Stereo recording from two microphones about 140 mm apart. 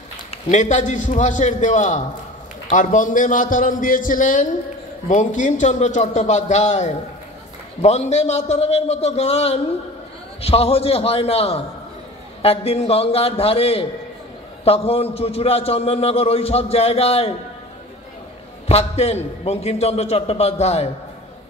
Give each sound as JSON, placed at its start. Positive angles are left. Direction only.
{"t": 0.3, "sound": "a man's voice", "side_deg": 55}
{"t": 18.7, "sound": "a man's voice", "side_deg": 45}